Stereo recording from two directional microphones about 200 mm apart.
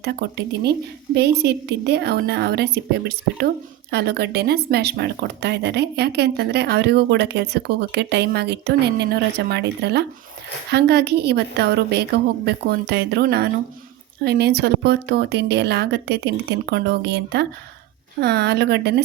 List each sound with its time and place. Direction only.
0.0 s speech: 55° right (ahead or behind)